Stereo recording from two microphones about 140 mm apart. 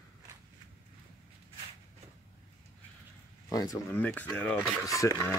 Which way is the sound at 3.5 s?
25° left (ahead or behind).